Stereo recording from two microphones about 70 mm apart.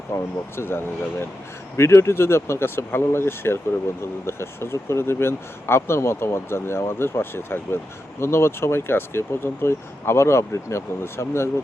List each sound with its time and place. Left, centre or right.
0.1 s speech: left